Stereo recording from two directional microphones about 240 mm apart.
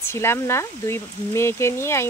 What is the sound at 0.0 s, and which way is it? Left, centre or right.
Speech, centre.